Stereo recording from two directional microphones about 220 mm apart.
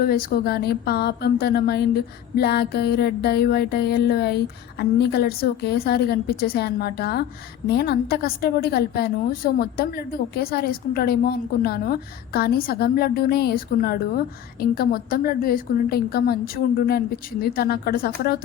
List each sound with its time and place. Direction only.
0.0 s speech: 45° left (ahead or behind)